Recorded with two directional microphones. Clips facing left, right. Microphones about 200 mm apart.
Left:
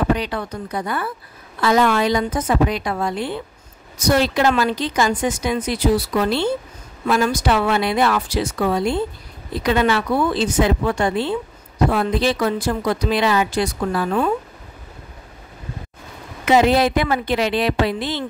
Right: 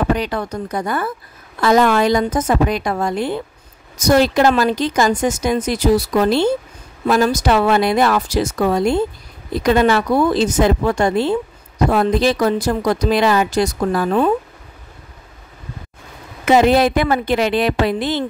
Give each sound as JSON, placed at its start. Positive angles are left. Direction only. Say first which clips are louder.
{"t": 0.1, "sound": "speech", "louder": "right 2 dB", "side_deg": -45}
{"t": 16.4, "sound": "speech", "louder": "right 3 dB", "side_deg": -50}